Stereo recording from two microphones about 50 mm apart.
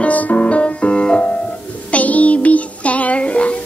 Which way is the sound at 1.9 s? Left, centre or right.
Left.